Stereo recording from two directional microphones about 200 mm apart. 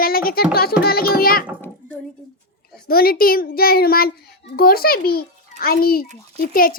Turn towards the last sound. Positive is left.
turn(degrees=45)  # may be behind; listen again after turning